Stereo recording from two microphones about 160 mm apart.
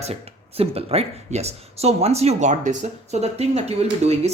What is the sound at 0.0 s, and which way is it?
Speech, 40° right (ahead or behind).